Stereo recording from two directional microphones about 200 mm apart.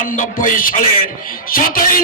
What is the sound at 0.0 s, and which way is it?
A man's voice, 40° left (ahead or behind).